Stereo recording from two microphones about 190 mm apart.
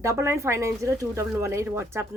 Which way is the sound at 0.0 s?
15° right (ahead or behind).